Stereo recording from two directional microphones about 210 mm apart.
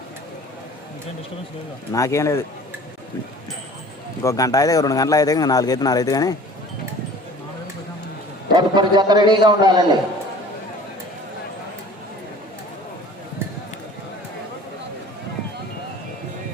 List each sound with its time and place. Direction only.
1.9 s a man's voice: 15° left (ahead or behind)
4.2 s a man's voice: 15° left (ahead or behind)
8.5 s a man's voice: 20° right (ahead or behind)